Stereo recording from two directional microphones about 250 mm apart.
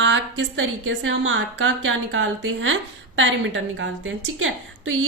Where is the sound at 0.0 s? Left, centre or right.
Right.